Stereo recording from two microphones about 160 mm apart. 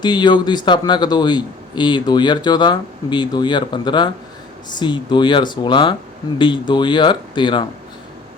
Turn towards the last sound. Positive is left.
turn(degrees=30)  # may be behind; listen again after turning